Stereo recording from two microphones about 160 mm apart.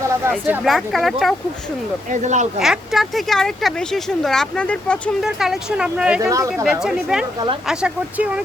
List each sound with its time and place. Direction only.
0.3 s speech: 10° right (ahead or behind)
0.6 s speech: centre (ahead or behind)
2.0 s speech: 50° right (ahead or behind)
2.6 s speech: centre (ahead or behind)
5.2 s speech: centre (ahead or behind)
6.2 s speech: 20° right (ahead or behind)
6.7 s speech: 5° right (ahead or behind)
7.3 s speech: 30° right (ahead or behind)
7.7 s speech: 5° right (ahead or behind)